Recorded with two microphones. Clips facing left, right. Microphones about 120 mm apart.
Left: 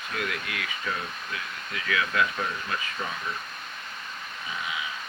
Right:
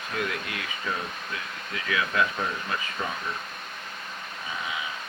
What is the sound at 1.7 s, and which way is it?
Speech, 25° right (ahead or behind).